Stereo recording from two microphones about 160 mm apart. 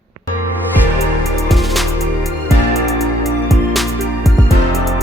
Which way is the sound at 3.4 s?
Centre (ahead or behind).